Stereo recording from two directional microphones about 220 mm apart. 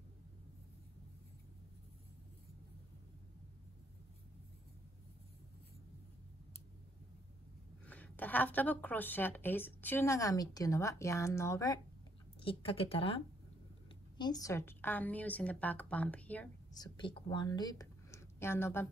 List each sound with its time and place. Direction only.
7.8 s a woman's voice: 5° left (ahead or behind)
12.4 s a woman's voice: 25° left (ahead or behind); by 16.4 s 5° left (ahead or behind)
16.7 s speech: 20° left (ahead or behind)